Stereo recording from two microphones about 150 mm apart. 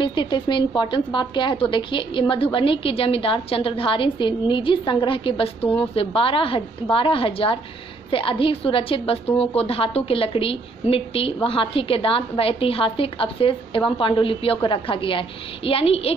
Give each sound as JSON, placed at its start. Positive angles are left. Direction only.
{"t": 0.0, "sound": "a woman's voice", "side_deg": 30}